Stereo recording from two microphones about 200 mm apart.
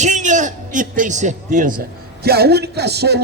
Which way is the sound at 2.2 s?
50° right (ahead or behind).